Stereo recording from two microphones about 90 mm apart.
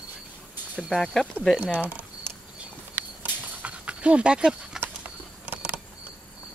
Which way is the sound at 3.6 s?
15° right (ahead or behind).